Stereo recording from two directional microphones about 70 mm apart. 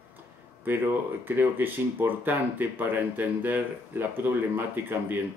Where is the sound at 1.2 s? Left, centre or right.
Right.